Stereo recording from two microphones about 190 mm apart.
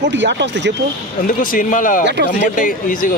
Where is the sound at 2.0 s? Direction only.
65° right (ahead or behind).